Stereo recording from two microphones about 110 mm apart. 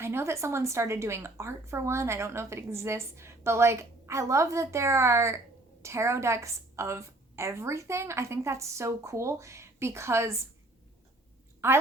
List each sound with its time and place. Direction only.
0.0 s a woman's voice: 25° right (ahead or behind)
11.6 s a woman's voice: 25° right (ahead or behind)